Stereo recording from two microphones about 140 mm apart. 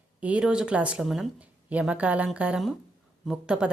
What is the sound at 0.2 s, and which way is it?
A woman's voice, 10° right (ahead or behind).